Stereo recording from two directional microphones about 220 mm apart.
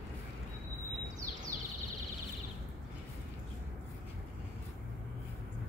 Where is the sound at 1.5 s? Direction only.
40° right (ahead or behind).